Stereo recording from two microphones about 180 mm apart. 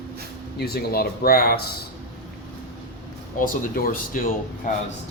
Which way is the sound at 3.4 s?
50° left (ahead or behind).